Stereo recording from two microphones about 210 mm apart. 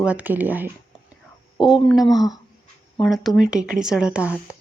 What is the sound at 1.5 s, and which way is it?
Speech, 20° left (ahead or behind).